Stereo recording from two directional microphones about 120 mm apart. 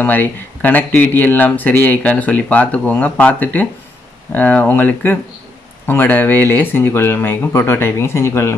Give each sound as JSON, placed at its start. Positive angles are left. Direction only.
{"t": 0.0, "sound": "speech", "side_deg": 15}